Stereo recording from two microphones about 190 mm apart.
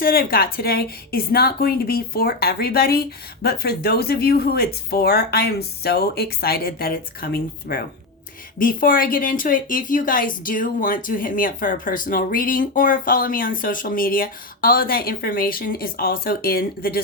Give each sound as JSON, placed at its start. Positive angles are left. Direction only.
{"t": 0.0, "sound": "a woman's voice", "side_deg": 50}